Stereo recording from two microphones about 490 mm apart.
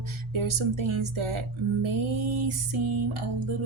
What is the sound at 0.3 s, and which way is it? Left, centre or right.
Music, right.